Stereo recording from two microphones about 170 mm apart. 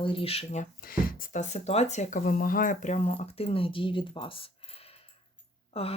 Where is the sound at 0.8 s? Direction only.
60° left (ahead or behind); by 4.5 s 30° left (ahead or behind).